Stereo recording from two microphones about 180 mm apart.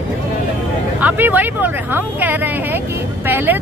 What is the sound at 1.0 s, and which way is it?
Speech, 10° right (ahead or behind).